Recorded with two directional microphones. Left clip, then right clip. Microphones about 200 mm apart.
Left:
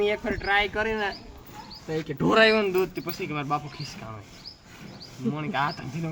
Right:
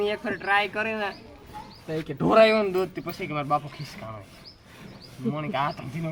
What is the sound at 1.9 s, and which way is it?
Speech, centre (ahead or behind).